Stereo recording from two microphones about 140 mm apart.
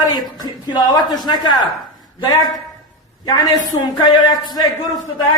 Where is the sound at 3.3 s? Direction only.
30° left (ahead or behind).